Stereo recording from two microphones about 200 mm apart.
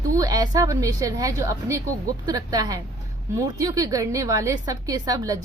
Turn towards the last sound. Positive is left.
turn(degrees=-20)  # may be behind; listen again after turning